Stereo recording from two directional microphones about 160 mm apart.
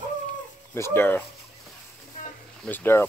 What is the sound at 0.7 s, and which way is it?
Speech, 15° left (ahead or behind).